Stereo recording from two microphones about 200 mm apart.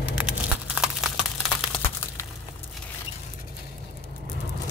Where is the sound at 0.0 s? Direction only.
5° right (ahead or behind).